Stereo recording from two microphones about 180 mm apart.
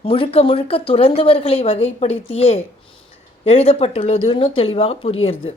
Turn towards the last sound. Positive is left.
turn(degrees=30)  # may be behind; listen again after turning